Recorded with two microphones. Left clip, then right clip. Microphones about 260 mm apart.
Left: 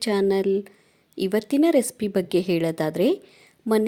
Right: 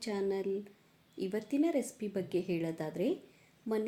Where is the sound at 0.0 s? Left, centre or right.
Left.